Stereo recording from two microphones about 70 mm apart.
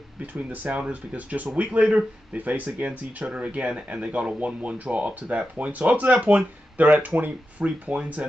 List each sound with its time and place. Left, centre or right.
0.3 s speech: right